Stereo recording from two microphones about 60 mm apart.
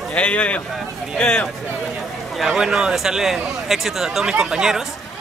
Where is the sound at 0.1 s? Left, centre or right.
Centre.